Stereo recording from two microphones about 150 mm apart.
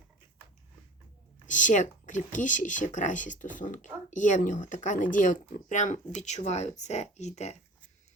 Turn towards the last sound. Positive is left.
turn(degrees=50)  # may be behind; listen again after turning